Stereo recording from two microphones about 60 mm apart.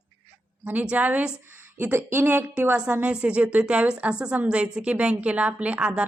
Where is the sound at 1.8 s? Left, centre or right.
Right.